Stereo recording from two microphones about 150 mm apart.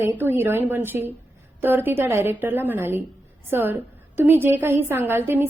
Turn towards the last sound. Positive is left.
turn(degrees=-15)  # may be behind; listen again after turning